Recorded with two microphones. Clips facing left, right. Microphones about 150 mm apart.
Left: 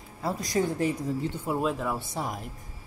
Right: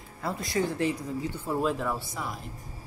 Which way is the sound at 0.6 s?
25° left (ahead or behind).